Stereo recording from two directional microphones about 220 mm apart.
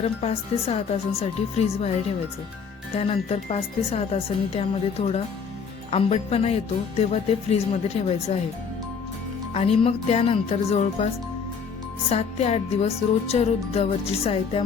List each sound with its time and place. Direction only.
0.0 s music: 25° left (ahead or behind)
2.9 s music: 30° left (ahead or behind)
9.5 s music: 30° left (ahead or behind)